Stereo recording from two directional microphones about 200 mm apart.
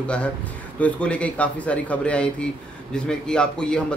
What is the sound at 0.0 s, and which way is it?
A man's voice, 5° left (ahead or behind).